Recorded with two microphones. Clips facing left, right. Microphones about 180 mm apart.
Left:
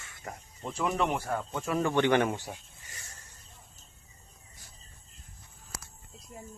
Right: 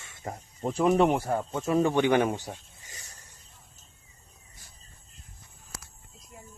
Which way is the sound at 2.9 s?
20° right (ahead or behind).